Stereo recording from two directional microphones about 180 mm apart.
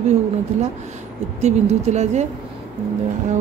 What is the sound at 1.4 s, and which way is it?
Speech, 40° right (ahead or behind).